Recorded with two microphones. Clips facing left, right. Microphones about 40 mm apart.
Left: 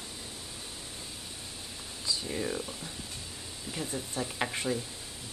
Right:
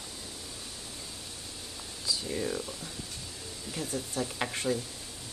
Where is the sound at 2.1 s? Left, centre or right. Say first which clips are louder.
Right 1 dB; centre.